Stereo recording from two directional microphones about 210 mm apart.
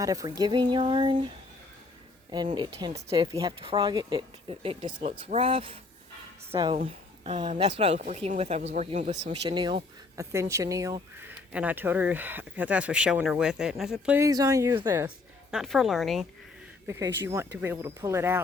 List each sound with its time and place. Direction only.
0.0 s speech: 15° right (ahead or behind)
2.6 s speech: 20° right (ahead or behind)
9.3 s speech: 20° right (ahead or behind)
15.5 s a woman's voice: centre (ahead or behind)
16.8 s speech: 10° right (ahead or behind)